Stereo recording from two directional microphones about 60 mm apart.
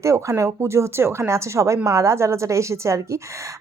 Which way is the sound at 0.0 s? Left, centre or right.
Right.